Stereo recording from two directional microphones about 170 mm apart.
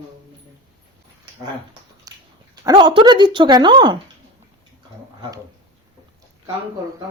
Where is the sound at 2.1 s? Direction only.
20° right (ahead or behind).